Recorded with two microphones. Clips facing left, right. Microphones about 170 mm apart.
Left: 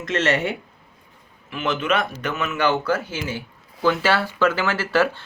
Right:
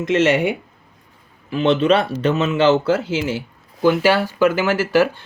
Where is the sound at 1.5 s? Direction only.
30° right (ahead or behind).